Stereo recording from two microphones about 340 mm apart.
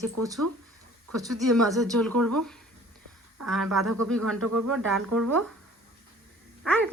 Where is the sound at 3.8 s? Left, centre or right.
Right.